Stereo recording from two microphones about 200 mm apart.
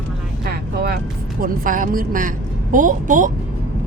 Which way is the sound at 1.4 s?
45° right (ahead or behind).